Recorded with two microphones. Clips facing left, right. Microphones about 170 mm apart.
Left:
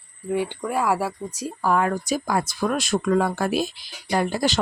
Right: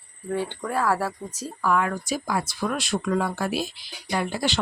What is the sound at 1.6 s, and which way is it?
Speech, 35° left (ahead or behind).